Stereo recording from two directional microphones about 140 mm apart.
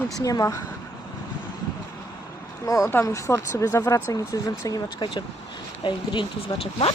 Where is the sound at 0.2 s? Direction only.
25° left (ahead or behind).